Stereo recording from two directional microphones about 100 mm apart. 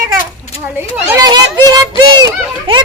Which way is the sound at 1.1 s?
40° right (ahead or behind).